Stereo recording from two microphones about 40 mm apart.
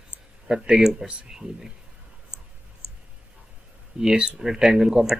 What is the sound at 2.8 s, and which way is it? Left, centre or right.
Clicking, left.